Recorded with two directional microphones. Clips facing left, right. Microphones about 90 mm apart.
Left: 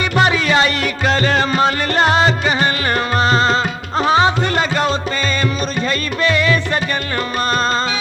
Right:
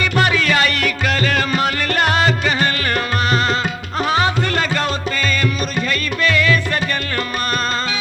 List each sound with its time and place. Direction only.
0.0 s music: 20° left (ahead or behind)